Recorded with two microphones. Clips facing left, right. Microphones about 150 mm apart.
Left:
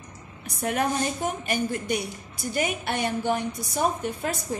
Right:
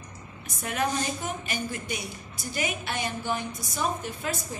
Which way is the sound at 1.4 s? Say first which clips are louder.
Left 6 dB; 55° left (ahead or behind).